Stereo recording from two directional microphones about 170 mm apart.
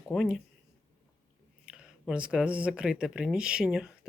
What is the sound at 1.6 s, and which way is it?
Speech, 5° right (ahead or behind).